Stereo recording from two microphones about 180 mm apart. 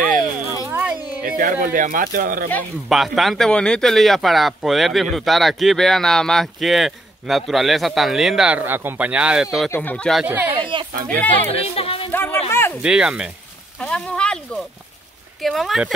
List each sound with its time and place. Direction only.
0.7 s a sound: 10° right (ahead or behind)
1.2 s speech: 50° right (ahead or behind)
2.9 s speech: centre (ahead or behind)
9.7 s speech: 10° left (ahead or behind)
10.2 s speech: 10° right (ahead or behind)
10.5 s speech: 25° right (ahead or behind)
11.1 s speech: 10° left (ahead or behind)
11.6 s speech: 35° left (ahead or behind)
12.1 s a sound: 10° left (ahead or behind)
12.8 s speech: 5° right (ahead or behind)
13.7 s speech: 5° left (ahead or behind)